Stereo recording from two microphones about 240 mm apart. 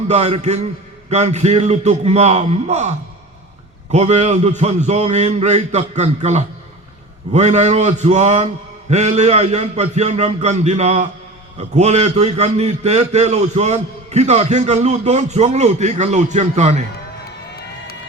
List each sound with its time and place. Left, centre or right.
0.1 s a man's voice: right
3.9 s a man's voice: right